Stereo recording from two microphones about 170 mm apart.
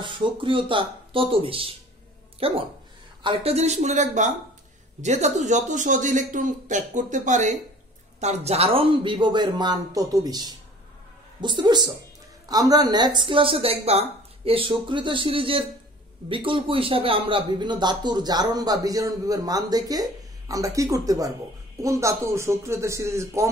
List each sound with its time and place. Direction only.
0.0 s a man's voice: 30° right (ahead or behind)